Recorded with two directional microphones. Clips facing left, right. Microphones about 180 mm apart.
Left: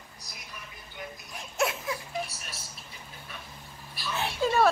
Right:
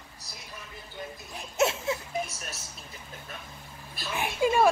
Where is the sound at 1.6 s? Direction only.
25° right (ahead or behind).